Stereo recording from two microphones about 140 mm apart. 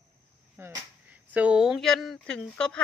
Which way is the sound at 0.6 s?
15° right (ahead or behind).